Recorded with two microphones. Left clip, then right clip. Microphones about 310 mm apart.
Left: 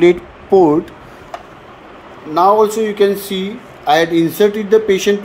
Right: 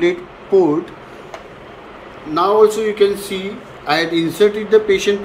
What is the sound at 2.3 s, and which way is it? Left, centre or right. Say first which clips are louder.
Speech: left 2 dB; left.